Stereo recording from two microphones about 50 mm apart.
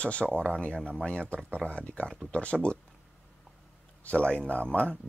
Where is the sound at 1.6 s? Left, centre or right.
Left.